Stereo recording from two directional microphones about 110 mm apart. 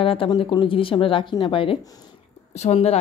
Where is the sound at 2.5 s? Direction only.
70° left (ahead or behind).